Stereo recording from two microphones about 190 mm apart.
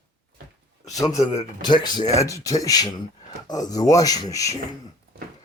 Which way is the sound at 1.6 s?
25° left (ahead or behind).